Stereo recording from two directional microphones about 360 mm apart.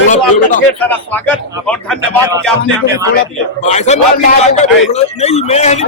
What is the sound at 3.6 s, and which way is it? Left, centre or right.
Speech, centre.